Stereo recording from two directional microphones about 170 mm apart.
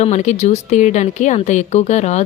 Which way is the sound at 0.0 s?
40° left (ahead or behind).